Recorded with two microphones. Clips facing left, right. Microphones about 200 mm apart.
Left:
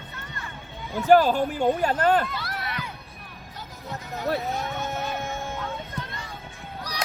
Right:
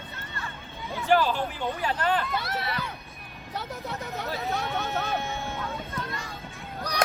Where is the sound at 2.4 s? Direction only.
25° right (ahead or behind).